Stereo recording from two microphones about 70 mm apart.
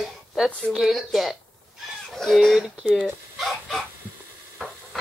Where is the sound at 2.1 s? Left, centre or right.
Centre.